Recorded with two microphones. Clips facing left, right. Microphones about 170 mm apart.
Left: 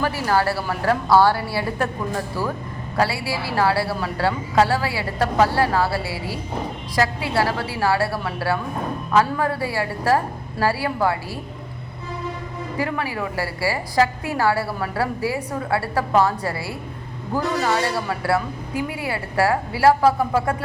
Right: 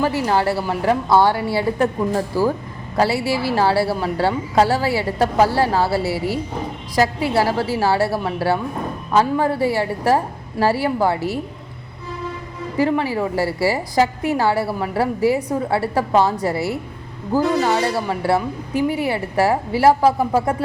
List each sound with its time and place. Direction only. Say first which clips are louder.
0.0 s a woman's voice: right 2 dB; 20° right (ahead or behind)
12.8 s a woman's voice: right 7 dB; 25° right (ahead or behind)